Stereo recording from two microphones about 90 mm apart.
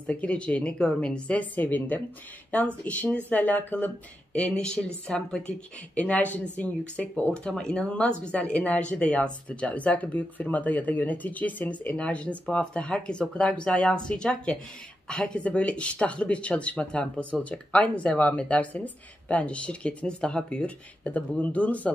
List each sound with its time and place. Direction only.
0.0 s speech: 15° left (ahead or behind)